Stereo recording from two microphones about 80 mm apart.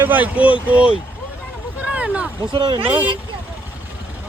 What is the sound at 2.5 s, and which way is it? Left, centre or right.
Speech, right.